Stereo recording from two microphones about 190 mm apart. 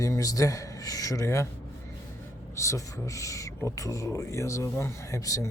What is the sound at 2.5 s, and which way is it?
Speech, 15° left (ahead or behind).